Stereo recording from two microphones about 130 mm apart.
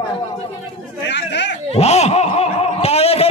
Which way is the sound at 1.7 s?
55° left (ahead or behind).